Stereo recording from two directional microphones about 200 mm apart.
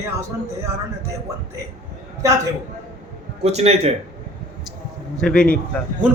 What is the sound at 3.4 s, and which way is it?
Speech, 30° right (ahead or behind).